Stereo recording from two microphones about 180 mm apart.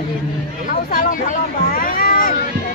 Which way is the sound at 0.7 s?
50° left (ahead or behind).